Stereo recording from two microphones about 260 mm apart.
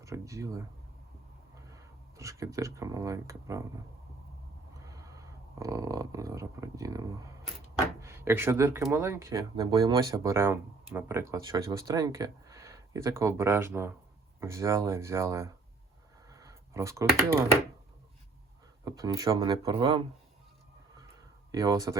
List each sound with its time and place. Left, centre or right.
0.0 s speech: centre
1.7 s speech: centre
4.9 s a man's voice: centre
16.3 s computer keyboard: centre
18.9 s speech: centre
21.5 s speech: centre